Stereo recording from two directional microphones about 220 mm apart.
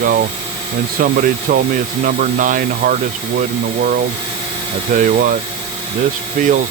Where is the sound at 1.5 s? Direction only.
40° right (ahead or behind).